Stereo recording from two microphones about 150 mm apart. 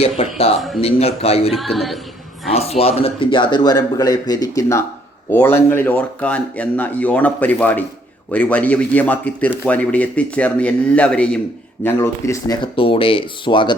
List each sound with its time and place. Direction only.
0.0 s speech: 40° left (ahead or behind)
1.7 s a sound: centre (ahead or behind)
2.5 s a man's voice: 40° left (ahead or behind); by 12.5 s 20° left (ahead or behind)
12.6 s speech: 35° left (ahead or behind)